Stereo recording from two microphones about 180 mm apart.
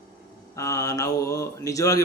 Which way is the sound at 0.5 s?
15° left (ahead or behind).